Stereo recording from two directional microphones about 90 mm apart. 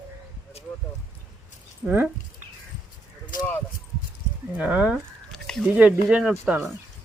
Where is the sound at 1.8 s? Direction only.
20° right (ahead or behind).